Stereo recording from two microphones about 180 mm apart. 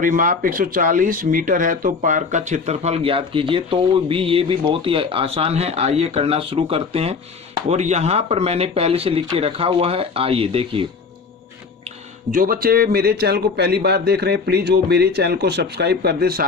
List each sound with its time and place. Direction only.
0.0 s speech: 50° right (ahead or behind); by 10.8 s 30° right (ahead or behind)
12.3 s a man's voice: 50° right (ahead or behind)